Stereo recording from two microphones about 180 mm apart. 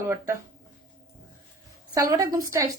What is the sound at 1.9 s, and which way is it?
Speech, 20° right (ahead or behind).